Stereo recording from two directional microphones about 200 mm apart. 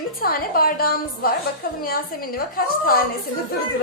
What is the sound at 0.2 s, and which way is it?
A woman's voice, 45° left (ahead or behind).